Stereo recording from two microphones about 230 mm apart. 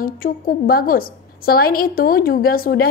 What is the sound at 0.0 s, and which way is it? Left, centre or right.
A woman's voice, left.